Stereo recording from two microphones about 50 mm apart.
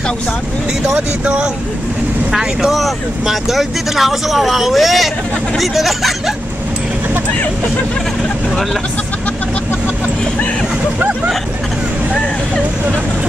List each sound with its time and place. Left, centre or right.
0.8 s speech: right
2.3 s speech: centre